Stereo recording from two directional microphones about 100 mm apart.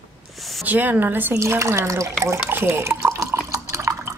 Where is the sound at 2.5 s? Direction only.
20° right (ahead or behind).